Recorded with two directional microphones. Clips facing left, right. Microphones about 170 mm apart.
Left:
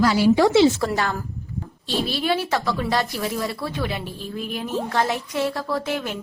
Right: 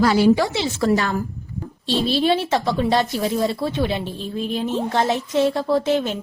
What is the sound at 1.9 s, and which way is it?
A woman's voice, 25° right (ahead or behind).